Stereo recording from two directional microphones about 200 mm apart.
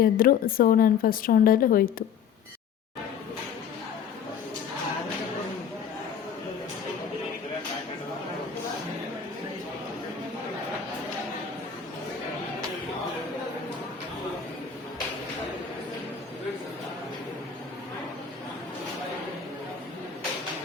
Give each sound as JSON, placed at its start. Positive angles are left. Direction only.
{"t": 0.0, "sound": "a woman's voice", "side_deg": 45}